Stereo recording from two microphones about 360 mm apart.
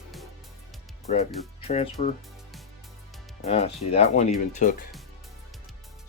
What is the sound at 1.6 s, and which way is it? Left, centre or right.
Speech, centre.